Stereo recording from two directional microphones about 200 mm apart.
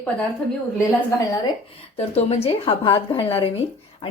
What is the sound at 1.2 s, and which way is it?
Speech, 15° left (ahead or behind).